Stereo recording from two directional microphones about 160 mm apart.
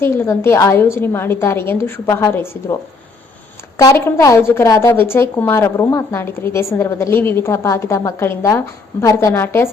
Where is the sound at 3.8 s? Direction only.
20° left (ahead or behind).